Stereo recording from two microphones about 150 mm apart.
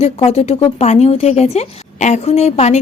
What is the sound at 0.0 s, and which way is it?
Speech, 40° left (ahead or behind).